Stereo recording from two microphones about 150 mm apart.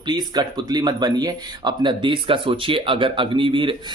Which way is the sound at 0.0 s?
30° right (ahead or behind).